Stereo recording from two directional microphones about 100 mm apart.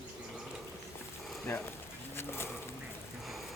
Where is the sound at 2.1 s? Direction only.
25° left (ahead or behind).